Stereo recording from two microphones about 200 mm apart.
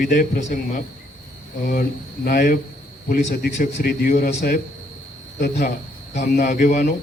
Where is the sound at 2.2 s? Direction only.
45° left (ahead or behind).